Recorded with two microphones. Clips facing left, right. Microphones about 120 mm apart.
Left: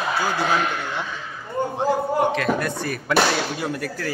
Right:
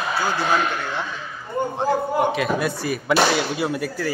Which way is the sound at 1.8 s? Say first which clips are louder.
Even; 10° right (ahead or behind).